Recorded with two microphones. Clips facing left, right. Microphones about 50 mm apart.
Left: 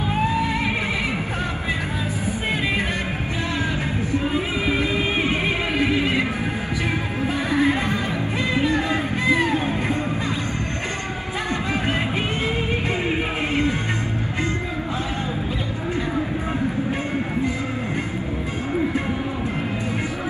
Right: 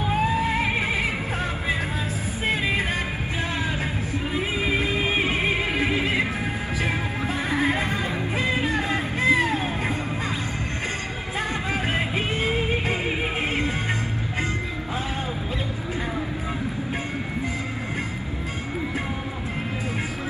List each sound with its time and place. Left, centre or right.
5.4 s music: right
7.2 s music: right
8.5 s music: left